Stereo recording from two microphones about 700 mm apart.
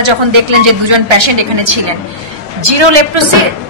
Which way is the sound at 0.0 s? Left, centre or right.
Right.